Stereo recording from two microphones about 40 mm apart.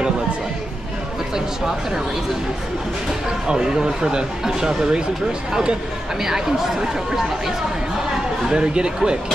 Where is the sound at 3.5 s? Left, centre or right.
Centre.